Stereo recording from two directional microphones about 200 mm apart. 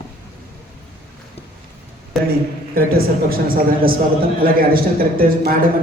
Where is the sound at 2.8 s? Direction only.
50° right (ahead or behind).